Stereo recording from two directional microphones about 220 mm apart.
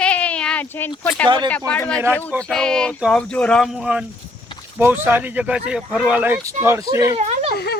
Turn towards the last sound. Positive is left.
turn(degrees=-30)  # may be behind; listen again after turning